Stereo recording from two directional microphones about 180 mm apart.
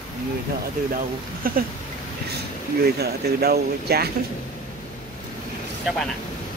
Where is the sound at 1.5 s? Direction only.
55° right (ahead or behind).